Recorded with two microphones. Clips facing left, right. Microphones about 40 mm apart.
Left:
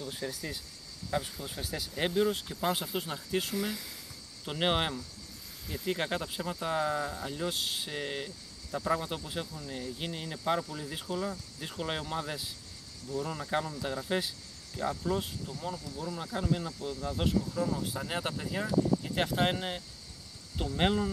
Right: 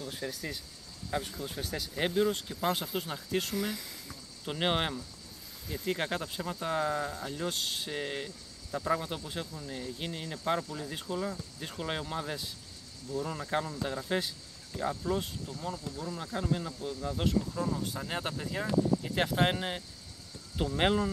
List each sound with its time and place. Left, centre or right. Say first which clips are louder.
0.0 s speech: even; centre